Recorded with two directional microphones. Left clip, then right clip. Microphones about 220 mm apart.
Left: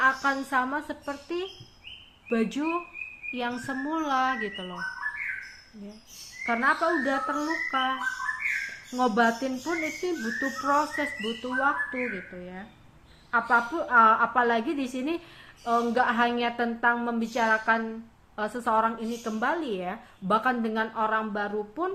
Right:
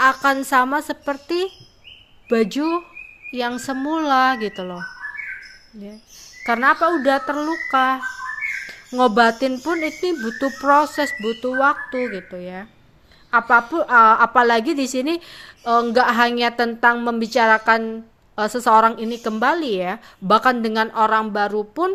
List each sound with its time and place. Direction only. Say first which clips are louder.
0.0 s a woman's voice: right 8 dB; 50° right (ahead or behind)
6.4 s a woman's voice: right 8 dB; 50° right (ahead or behind)
9.0 s a woman's voice: right 9 dB; 50° right (ahead or behind)